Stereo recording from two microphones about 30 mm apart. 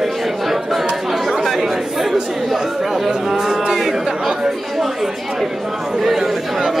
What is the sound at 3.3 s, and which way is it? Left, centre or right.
Speech, centre.